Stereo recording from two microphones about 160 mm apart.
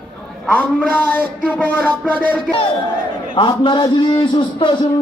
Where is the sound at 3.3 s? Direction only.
30° left (ahead or behind).